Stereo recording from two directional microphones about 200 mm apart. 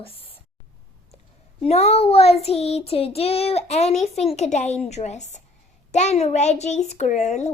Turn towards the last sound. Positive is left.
turn(degrees=35)  # may be behind; listen again after turning